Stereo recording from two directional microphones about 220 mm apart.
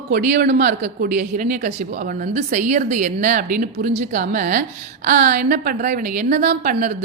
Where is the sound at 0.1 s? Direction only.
45° right (ahead or behind).